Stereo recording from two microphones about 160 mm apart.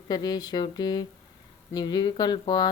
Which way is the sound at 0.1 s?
25° left (ahead or behind).